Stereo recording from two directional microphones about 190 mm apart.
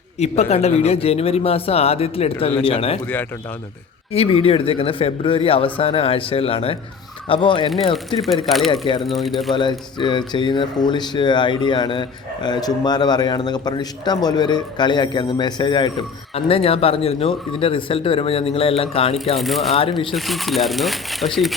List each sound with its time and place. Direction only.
0.2 s speech: 35° left (ahead or behind)
4.1 s speech: 30° left (ahead or behind)
8.2 s speech: centre (ahead or behind)
9.6 s speech: 25° left (ahead or behind)
19.4 s speech: centre (ahead or behind)
19.7 s speech: 30° left (ahead or behind)
20.1 s speech: centre (ahead or behind)